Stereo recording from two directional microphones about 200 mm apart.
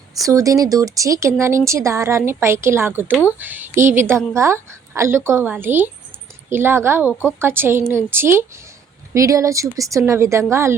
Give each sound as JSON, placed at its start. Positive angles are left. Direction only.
{"t": 0.2, "sound": "a woman's voice", "side_deg": -15}
{"t": 7.1, "sound": "speech", "side_deg": 10}
{"t": 7.3, "sound": "a woman's voice", "side_deg": -10}